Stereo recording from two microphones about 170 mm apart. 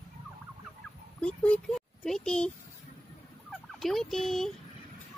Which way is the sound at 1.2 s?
5° left (ahead or behind).